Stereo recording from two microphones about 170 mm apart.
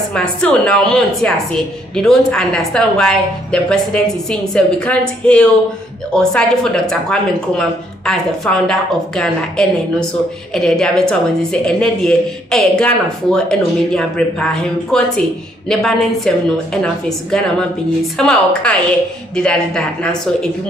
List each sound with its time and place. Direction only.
0.1 s speech: 5° left (ahead or behind)